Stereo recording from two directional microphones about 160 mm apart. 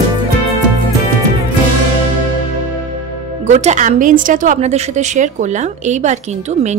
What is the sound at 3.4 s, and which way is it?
A woman's voice, 45° right (ahead or behind).